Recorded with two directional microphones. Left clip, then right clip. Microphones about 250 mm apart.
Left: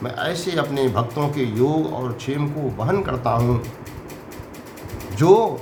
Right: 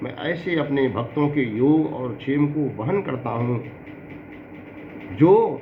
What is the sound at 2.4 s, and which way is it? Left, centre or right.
Speech, left.